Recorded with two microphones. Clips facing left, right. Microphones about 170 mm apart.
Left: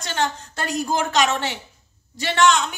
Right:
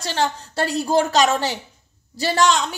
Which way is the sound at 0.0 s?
35° right (ahead or behind).